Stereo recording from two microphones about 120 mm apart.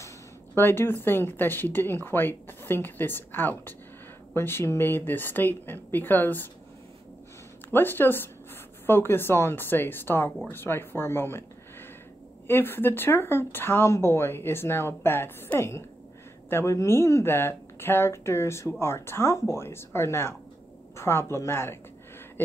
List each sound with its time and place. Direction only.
0.6 s speech: 20° left (ahead or behind)
7.7 s speech: 15° left (ahead or behind)
12.4 s speech: 20° left (ahead or behind)